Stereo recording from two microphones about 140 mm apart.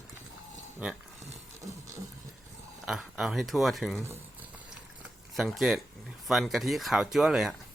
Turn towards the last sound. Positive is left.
turn(degrees=-5)  # may be behind; listen again after turning